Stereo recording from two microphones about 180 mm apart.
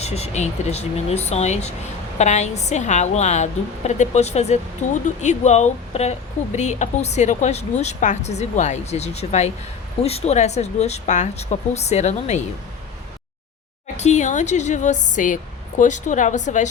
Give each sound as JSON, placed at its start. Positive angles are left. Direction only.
{"t": 0.0, "sound": "speech", "side_deg": 35}
{"t": 13.9, "sound": "speech", "side_deg": 40}